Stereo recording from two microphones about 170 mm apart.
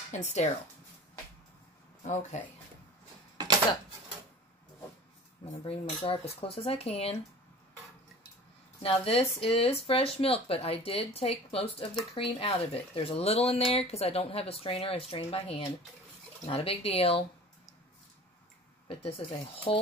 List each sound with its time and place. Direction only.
0.1 s speech: 40° left (ahead or behind)
2.3 s speech: 45° left (ahead or behind)
5.4 s speech: 35° left (ahead or behind)
8.8 s speech: 35° left (ahead or behind)
18.9 s speech: 35° left (ahead or behind)